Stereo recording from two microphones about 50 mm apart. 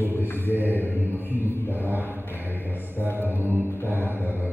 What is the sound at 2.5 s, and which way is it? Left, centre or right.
Speech, left.